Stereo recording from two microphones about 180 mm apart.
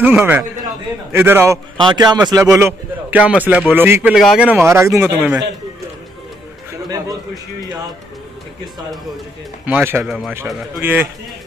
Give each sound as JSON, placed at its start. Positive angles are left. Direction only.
{"t": 0.0, "sound": "a man's voice", "side_deg": -10}
{"t": 2.5, "sound": "a man's voice", "side_deg": -10}
{"t": 6.8, "sound": "a sound", "side_deg": -20}
{"t": 9.7, "sound": "a man's voice", "side_deg": -10}